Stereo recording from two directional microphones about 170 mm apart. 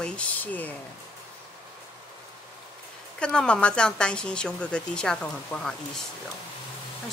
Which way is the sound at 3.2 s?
5° left (ahead or behind).